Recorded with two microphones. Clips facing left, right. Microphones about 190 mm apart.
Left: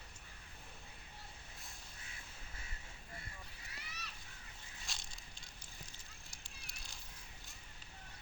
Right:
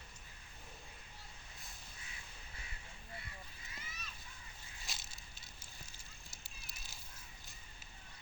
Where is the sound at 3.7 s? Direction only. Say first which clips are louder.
Left 1 dB; 70° left (ahead or behind).